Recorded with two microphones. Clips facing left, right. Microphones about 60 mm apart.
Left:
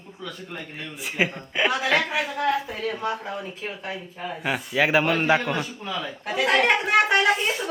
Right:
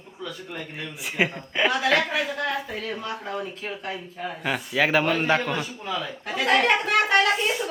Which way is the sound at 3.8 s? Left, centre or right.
Centre.